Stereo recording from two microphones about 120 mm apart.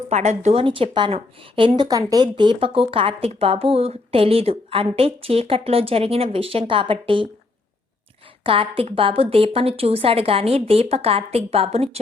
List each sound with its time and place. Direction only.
0.1 s speech: 75° right (ahead or behind)
0.5 s speech: 50° right (ahead or behind)
8.4 s speech: 50° right (ahead or behind)